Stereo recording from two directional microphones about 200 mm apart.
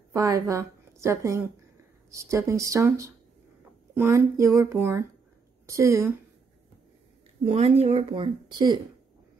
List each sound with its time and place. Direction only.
0.1 s a woman's voice: 15° right (ahead or behind)
7.5 s speech: 30° right (ahead or behind)